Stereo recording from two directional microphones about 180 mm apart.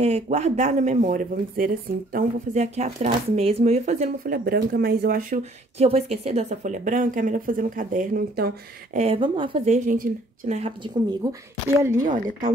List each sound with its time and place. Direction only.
0.0 s speech: 35° right (ahead or behind); by 8.5 s 55° right (ahead or behind)
8.9 s speech: 35° right (ahead or behind)
9.8 s speech: 45° right (ahead or behind)
11.2 s a woman's voice: 20° right (ahead or behind)
12.0 s speech: 45° right (ahead or behind)